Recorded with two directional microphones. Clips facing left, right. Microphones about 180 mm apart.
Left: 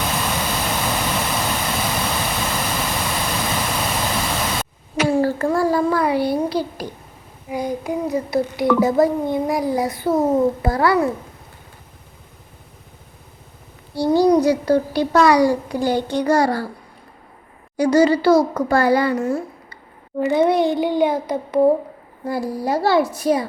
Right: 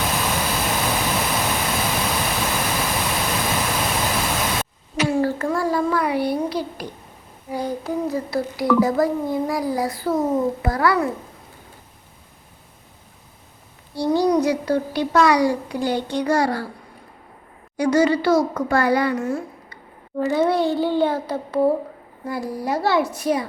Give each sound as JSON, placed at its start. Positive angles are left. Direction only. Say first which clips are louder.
{"t": 0.0, "sound": "vehicle", "louder": "even", "side_deg": 0}
{"t": 5.2, "sound": "a sound", "louder": "left 3 dB", "side_deg": 35}
{"t": 7.5, "sound": "a child's voice", "louder": "left 1 dB", "side_deg": 15}
{"t": 14.1, "sound": "a child's voice", "louder": "left 4 dB", "side_deg": 35}
{"t": 17.7, "sound": "a child's voice", "louder": "left 3 dB", "side_deg": 35}
{"t": 20.1, "sound": "a child's voice", "louder": "left 3 dB", "side_deg": 20}
{"t": 22.3, "sound": "a child's voice", "louder": "left 3 dB", "side_deg": 35}